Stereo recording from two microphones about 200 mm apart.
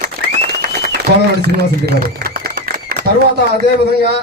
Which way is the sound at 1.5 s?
50° right (ahead or behind).